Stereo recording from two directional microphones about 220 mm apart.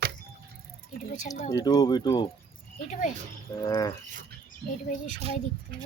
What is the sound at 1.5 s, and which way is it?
Speech, 15° left (ahead or behind).